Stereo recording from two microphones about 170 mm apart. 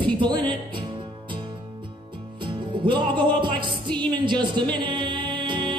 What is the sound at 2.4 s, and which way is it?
Music, 30° right (ahead or behind).